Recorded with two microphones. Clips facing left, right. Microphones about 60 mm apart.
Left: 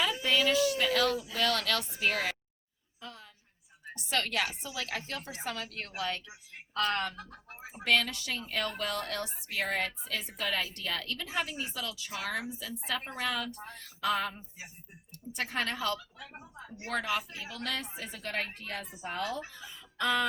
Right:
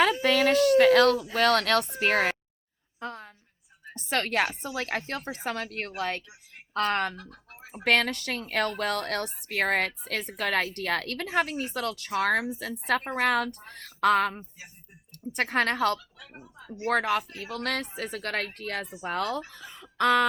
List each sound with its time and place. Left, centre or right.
0.0 s speech: right
3.0 s a sound: right
3.9 s a woman's voice: right
7.2 s speech: centre
7.9 s a woman's voice: right
16.2 s speech: centre
16.6 s speech: left
16.8 s a woman's voice: right